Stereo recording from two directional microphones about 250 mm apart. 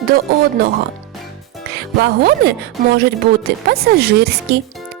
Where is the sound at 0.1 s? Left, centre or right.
Right.